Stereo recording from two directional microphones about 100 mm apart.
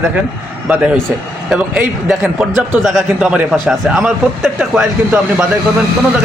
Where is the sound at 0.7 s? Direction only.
15° right (ahead or behind).